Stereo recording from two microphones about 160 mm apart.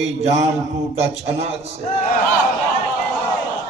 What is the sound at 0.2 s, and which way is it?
A man's voice, 45° right (ahead or behind).